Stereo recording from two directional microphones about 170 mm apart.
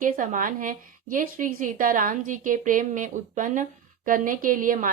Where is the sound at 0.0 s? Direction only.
50° right (ahead or behind).